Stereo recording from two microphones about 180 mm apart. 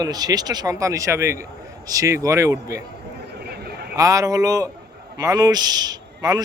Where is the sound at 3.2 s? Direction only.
65° right (ahead or behind).